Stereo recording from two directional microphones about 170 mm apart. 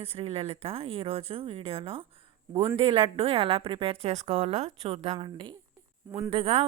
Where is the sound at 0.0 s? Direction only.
35° right (ahead or behind).